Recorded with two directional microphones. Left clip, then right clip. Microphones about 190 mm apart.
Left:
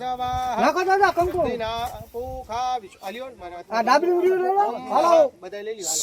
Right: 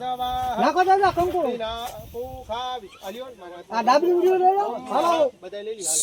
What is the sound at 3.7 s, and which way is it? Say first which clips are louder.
Speech: even; 30° right (ahead or behind).